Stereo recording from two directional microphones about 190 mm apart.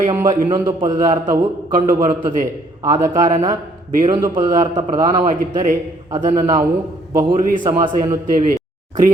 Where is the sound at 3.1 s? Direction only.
40° right (ahead or behind).